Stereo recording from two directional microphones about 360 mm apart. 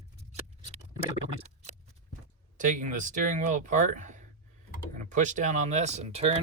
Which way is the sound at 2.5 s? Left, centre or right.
Right.